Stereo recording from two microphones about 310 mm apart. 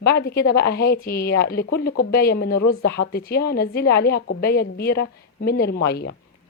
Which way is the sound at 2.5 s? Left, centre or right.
Left.